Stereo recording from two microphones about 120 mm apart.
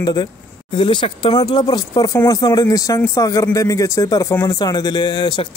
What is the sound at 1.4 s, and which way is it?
Speech, 35° left (ahead or behind).